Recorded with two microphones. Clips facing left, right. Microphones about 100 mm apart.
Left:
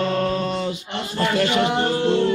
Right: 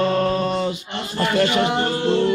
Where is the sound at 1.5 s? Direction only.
5° right (ahead or behind).